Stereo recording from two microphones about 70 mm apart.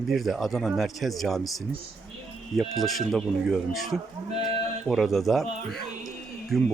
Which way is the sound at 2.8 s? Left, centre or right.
Centre.